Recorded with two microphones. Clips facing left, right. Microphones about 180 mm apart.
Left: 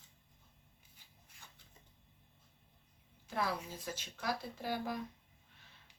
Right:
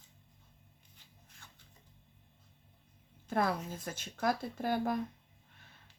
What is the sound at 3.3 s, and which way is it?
Speech, 50° right (ahead or behind).